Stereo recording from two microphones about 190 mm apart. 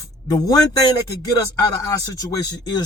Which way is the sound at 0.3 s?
20° left (ahead or behind).